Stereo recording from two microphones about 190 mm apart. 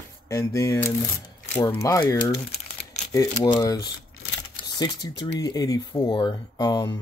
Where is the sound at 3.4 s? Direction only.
15° left (ahead or behind).